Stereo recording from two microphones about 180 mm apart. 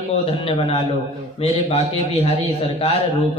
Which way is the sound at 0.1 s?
30° left (ahead or behind).